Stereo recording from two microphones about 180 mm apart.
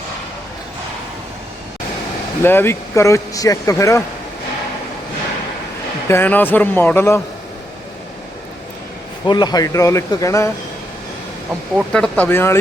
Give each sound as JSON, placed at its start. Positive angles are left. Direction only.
{"t": 2.4, "sound": "speech", "side_deg": 10}
{"t": 6.1, "sound": "speech", "side_deg": 10}
{"t": 9.2, "sound": "speech", "side_deg": 25}
{"t": 11.9, "sound": "speech", "side_deg": 5}